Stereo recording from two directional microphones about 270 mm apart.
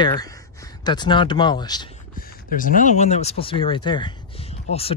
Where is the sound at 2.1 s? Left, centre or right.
Left.